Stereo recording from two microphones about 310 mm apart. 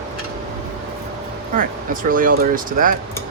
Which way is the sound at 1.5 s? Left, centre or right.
Right.